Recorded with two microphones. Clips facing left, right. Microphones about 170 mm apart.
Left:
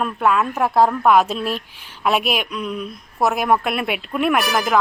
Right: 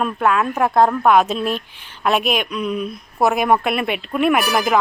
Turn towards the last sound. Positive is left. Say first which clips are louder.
# right 1 dB
turn(degrees=-5)  # may be behind; listen again after turning